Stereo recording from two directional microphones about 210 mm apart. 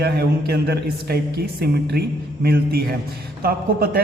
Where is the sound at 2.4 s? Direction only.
45° right (ahead or behind).